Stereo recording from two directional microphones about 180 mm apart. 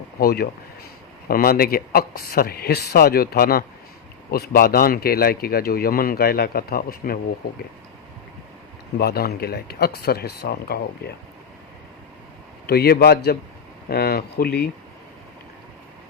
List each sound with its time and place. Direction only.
0.2 s speech: 55° left (ahead or behind)
9.0 s speech: 60° left (ahead or behind)
12.6 s speech: 60° left (ahead or behind)